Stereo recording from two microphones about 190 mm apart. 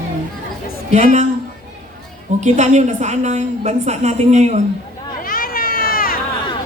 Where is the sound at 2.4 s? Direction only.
40° right (ahead or behind).